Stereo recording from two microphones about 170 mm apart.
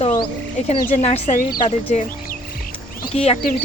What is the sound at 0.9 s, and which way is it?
A woman's voice, 40° left (ahead or behind).